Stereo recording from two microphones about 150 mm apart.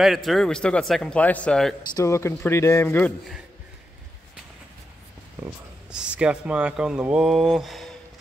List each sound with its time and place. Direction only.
0.0 s speech: centre (ahead or behind)
2.0 s a man's voice: 20° left (ahead or behind)
5.4 s speech: 5° right (ahead or behind)